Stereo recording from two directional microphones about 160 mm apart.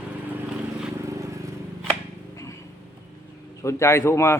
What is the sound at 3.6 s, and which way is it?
Speech, 15° left (ahead or behind).